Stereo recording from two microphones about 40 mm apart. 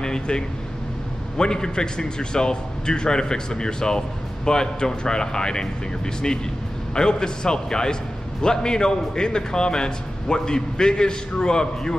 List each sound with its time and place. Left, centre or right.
0.0 s vehicle: centre
1.4 s a man's voice: centre
6.9 s a man's voice: centre